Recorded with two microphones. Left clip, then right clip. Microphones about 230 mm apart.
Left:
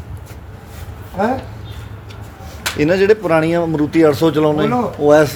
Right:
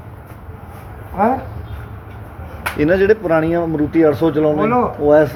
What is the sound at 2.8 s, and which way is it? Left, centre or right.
Speech, centre.